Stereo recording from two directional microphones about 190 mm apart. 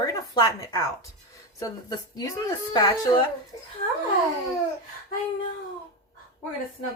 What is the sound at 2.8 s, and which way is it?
Speech, 20° left (ahead or behind).